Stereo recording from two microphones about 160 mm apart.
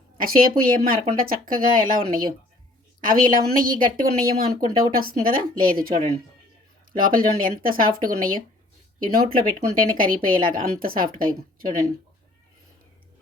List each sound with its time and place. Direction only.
0.2 s a woman's voice: 65° right (ahead or behind)
3.0 s a woman's voice: 60° right (ahead or behind)